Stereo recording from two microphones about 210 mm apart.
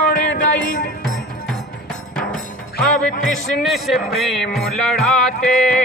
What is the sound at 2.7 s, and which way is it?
Music, 40° left (ahead or behind).